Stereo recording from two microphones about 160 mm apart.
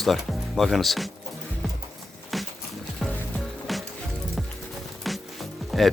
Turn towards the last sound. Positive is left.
turn(degrees=0)  # may be behind; listen again after turning